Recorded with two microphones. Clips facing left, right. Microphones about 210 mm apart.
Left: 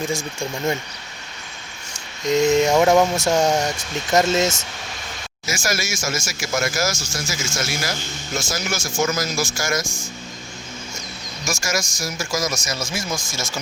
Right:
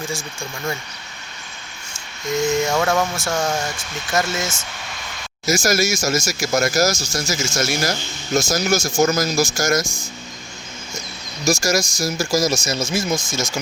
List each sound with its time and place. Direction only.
0.3 s speech: 20° left (ahead or behind)
2.3 s speech: 20° left (ahead or behind)
5.5 s speech: 40° right (ahead or behind)
11.4 s speech: 35° right (ahead or behind)
12.9 s speech: 20° right (ahead or behind)